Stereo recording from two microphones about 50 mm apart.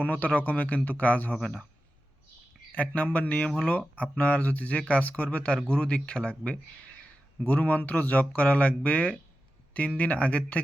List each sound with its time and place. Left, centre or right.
0.0 s speech: left
1.3 s speech: left
2.7 s speech: left